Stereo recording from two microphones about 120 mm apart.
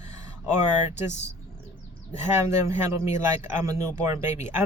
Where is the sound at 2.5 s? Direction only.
25° right (ahead or behind).